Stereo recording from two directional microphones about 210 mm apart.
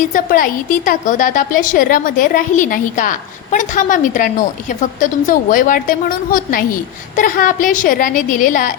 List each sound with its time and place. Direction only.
0.1 s a woman's voice: 40° left (ahead or behind)